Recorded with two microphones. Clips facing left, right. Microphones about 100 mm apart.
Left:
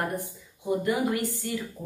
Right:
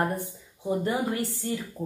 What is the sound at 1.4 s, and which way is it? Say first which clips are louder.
Speech: right 1 dB; 25° right (ahead or behind).